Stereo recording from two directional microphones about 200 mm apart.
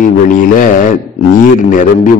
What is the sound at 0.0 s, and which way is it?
A man's voice, 40° left (ahead or behind).